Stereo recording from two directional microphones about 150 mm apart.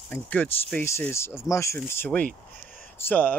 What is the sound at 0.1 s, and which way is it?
Speech, 10° left (ahead or behind).